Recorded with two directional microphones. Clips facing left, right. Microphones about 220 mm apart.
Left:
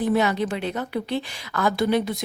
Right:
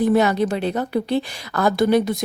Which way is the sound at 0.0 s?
40° right (ahead or behind).